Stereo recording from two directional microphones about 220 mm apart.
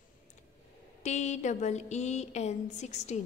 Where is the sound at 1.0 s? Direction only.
30° left (ahead or behind).